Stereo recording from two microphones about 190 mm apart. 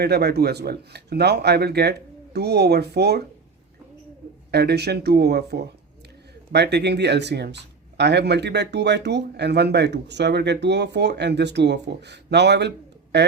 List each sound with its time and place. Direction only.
0.0 s speech: 60° right (ahead or behind)
4.5 s speech: 60° right (ahead or behind)